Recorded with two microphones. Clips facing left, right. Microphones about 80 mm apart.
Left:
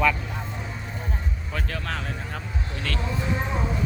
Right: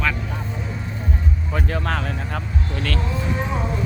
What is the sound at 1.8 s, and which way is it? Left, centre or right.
Vehicle, right.